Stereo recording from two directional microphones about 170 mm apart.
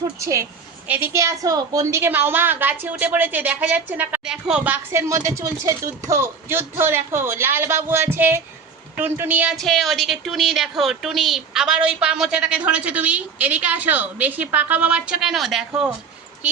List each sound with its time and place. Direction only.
0.2 s a woman's voice: 20° right (ahead or behind)
9.6 s a woman's voice: centre (ahead or behind)